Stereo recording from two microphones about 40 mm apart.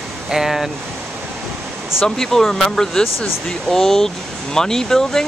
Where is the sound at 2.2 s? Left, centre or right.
Centre.